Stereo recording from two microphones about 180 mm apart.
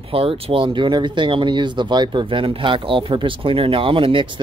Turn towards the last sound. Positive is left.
turn(degrees=-30)  # may be behind; listen again after turning